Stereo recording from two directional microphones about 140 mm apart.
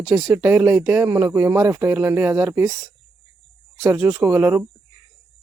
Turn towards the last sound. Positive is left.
turn(degrees=-15)  # may be behind; listen again after turning